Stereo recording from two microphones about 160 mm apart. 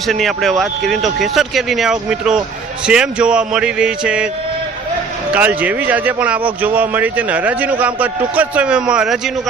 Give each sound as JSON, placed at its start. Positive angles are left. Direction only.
{"t": 0.1, "sound": "speech", "side_deg": 0}
{"t": 5.3, "sound": "speech", "side_deg": -10}